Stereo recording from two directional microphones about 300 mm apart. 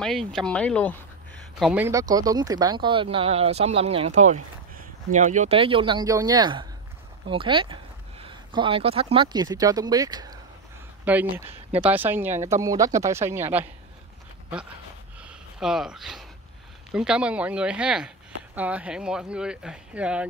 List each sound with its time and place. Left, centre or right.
0.0 s speech: centre
15.2 s a sound: centre
16.9 s speech: centre